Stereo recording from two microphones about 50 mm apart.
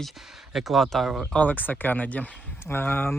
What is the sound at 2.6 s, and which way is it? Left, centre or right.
Speech, left.